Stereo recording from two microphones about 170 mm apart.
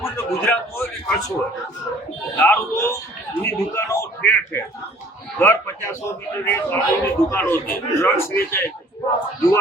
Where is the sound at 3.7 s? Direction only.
15° left (ahead or behind).